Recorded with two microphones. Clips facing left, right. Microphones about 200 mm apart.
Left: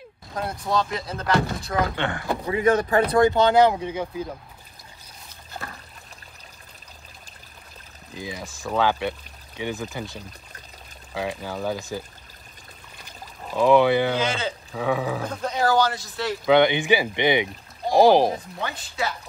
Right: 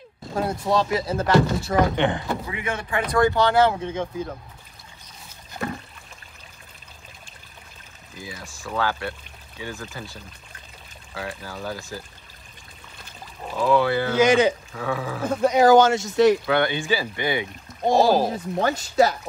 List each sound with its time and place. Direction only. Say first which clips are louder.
0.4 s speech: right 3 dB; centre (ahead or behind)
2.0 s speech: right 5 dB; 20° right (ahead or behind)
2.4 s speech: left 9 dB; 35° left (ahead or behind)
3.2 s speech: even; 20° left (ahead or behind)
8.2 s speech: left 4 dB; 20° left (ahead or behind)
11.1 s speech: left 4 dB; 20° left (ahead or behind)
13.6 s speech: left 3 dB; 20° left (ahead or behind)
14.2 s speech: right 9 dB; 15° right (ahead or behind)
14.7 s speech: left 3 dB; 15° left (ahead or behind)
15.4 s speech: right 7 dB; 15° right (ahead or behind)
16.4 s speech: left 4 dB; 20° left (ahead or behind)
18.6 s speech: right 15 dB; 45° right (ahead or behind)